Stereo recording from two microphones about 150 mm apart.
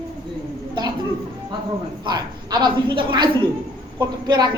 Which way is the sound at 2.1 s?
30° right (ahead or behind).